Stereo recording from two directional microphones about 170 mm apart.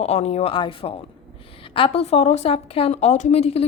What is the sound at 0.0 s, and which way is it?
A woman's voice, 40° left (ahead or behind).